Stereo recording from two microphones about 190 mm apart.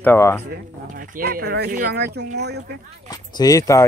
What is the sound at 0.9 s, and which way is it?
Speech, 50° right (ahead or behind).